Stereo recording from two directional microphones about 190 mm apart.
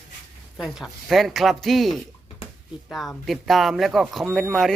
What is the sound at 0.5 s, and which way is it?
Speech, centre (ahead or behind).